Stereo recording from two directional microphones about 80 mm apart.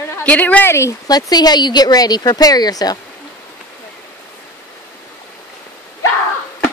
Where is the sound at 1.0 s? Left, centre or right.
Left.